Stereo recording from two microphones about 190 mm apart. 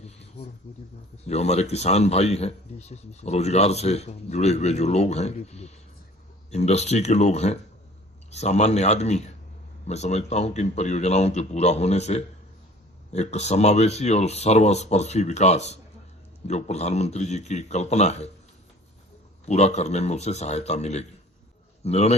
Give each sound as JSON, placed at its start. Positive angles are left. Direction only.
{"t": 1.3, "sound": "speech", "side_deg": 35}
{"t": 19.5, "sound": "speech", "side_deg": 35}